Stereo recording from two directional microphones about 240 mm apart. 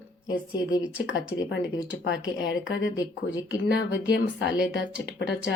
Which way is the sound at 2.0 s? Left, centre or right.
Left.